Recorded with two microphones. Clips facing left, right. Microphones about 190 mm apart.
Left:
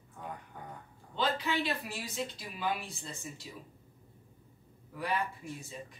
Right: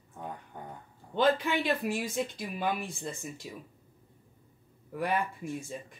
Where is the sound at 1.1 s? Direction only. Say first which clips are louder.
Right 6 dB; 50° right (ahead or behind).